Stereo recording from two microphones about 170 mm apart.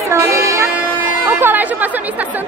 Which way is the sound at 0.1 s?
15° right (ahead or behind).